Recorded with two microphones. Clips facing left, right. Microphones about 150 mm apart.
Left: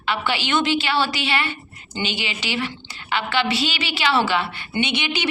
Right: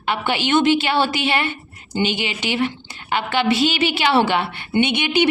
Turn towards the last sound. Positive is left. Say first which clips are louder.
# right 6 dB
turn(degrees=-55)  # may be behind; listen again after turning